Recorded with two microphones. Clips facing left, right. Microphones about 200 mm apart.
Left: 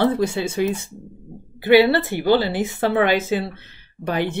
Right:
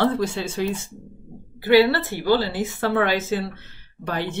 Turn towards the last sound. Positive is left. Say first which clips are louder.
# left 4 dB
turn(degrees=15)  # may be behind; listen again after turning